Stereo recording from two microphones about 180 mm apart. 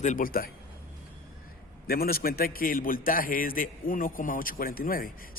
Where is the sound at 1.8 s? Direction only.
55° left (ahead or behind).